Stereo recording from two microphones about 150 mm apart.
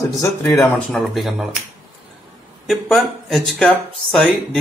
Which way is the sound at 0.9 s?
Centre (ahead or behind).